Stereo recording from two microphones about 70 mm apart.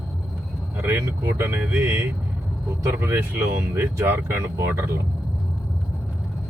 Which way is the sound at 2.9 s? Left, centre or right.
Right.